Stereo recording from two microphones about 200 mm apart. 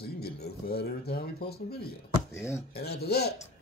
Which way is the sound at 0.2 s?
50° left (ahead or behind).